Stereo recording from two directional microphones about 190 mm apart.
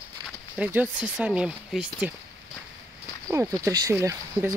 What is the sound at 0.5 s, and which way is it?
Speech, 10° right (ahead or behind).